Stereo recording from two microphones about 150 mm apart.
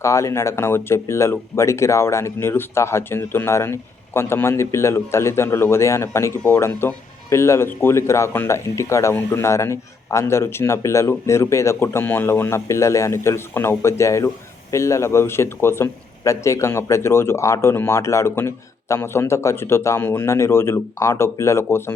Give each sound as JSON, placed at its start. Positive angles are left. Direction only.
{"t": 0.0, "sound": "speech", "side_deg": 20}